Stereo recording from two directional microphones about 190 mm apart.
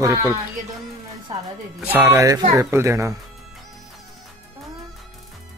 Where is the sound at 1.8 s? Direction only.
10° right (ahead or behind).